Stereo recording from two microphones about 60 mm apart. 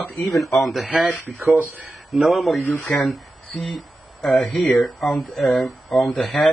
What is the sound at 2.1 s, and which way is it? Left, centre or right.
Speech, centre.